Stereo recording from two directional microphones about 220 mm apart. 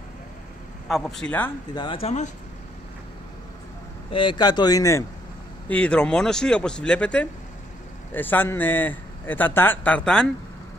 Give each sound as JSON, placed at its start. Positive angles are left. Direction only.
{"t": 0.8, "sound": "speech", "side_deg": 0}
{"t": 1.8, "sound": "speech", "side_deg": 25}
{"t": 4.1, "sound": "a man's voice", "side_deg": 20}